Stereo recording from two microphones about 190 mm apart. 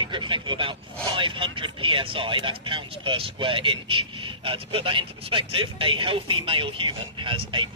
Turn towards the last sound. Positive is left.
turn(degrees=-25)  # may be behind; listen again after turning